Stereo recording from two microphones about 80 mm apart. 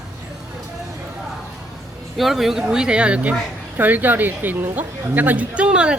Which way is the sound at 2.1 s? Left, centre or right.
Centre.